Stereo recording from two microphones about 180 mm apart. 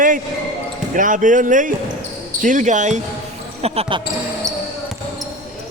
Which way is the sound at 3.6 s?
30° right (ahead or behind).